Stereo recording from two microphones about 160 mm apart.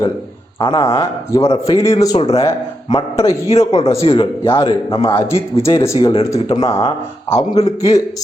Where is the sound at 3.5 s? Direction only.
40° left (ahead or behind).